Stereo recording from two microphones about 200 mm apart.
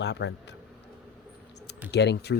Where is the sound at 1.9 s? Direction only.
55° left (ahead or behind).